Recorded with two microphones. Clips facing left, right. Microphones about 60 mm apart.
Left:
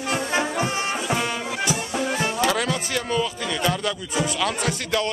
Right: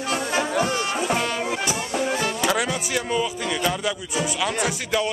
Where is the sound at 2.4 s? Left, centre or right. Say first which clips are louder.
Left 1 dB; centre.